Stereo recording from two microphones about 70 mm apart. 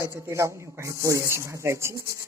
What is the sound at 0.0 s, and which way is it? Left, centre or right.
Speech, right.